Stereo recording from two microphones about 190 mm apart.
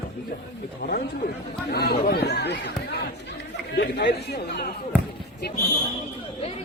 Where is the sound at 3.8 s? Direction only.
65° left (ahead or behind).